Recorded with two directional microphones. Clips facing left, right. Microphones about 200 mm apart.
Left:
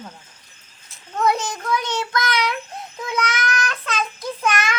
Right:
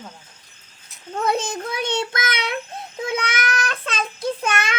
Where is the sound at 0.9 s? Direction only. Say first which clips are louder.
Left 1 dB; 25° right (ahead or behind).